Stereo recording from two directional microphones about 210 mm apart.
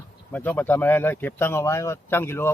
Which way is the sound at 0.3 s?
10° left (ahead or behind).